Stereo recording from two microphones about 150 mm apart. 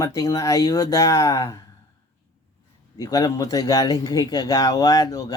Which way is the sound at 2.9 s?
25° left (ahead or behind).